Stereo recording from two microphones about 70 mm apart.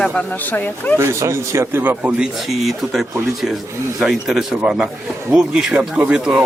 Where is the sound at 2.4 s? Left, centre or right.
Centre.